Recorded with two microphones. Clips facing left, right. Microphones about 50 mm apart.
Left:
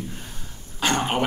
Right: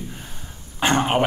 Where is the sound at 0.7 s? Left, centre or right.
Right.